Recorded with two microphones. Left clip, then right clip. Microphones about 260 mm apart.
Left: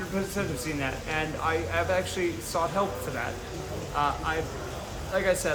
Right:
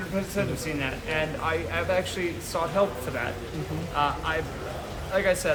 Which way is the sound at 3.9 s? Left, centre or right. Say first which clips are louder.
Right 1 dB; centre.